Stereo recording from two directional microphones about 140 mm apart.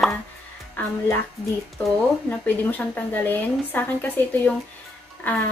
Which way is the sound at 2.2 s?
10° left (ahead or behind).